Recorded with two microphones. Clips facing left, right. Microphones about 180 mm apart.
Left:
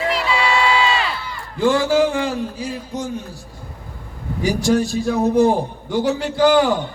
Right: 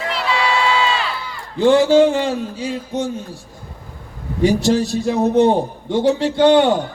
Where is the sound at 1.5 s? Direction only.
25° right (ahead or behind).